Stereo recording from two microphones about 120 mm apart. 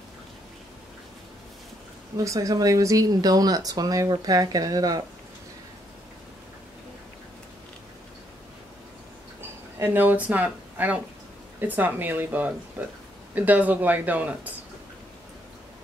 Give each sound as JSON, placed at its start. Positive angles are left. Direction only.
{"t": 2.1, "sound": "speech", "side_deg": -25}
{"t": 9.8, "sound": "speech", "side_deg": -20}